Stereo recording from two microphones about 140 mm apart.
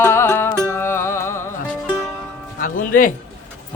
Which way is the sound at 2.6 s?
75° left (ahead or behind).